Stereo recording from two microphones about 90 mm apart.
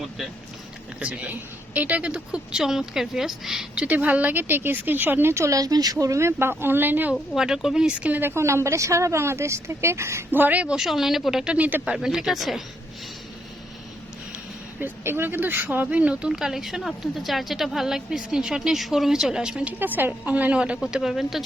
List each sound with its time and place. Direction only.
0.9 s speech: 15° right (ahead or behind)
3.8 s speech: 20° right (ahead or behind)
5.3 s speech: 35° right (ahead or behind)
7.1 s speech: 5° right (ahead or behind)
10.8 s speech: 5° right (ahead or behind)
11.9 s speech: 5° right (ahead or behind)
14.8 s speech: 25° right (ahead or behind); by 19.7 s 10° right (ahead or behind)
19.8 s speech: 20° right (ahead or behind)
20.8 s speech: centre (ahead or behind)